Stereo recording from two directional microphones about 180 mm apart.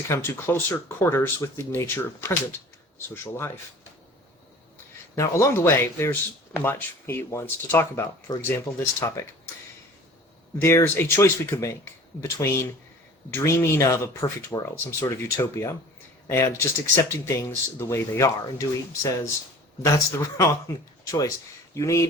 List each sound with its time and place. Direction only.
0.1 s speech: 15° left (ahead or behind)
5.1 s speech: 15° left (ahead or behind)
10.6 s speech: 15° left (ahead or behind)